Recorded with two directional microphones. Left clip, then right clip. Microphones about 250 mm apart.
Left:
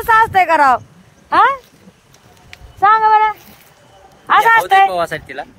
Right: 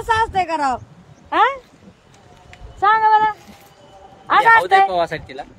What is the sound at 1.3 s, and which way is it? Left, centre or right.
Speech, left.